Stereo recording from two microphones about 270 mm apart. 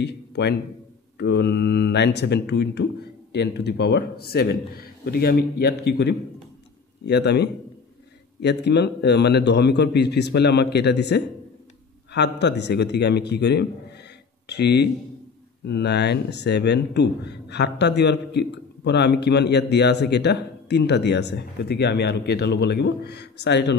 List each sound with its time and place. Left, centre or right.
0.0 s a man's voice: left